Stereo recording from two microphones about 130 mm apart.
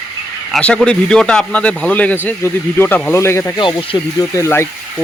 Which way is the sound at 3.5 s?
40° left (ahead or behind).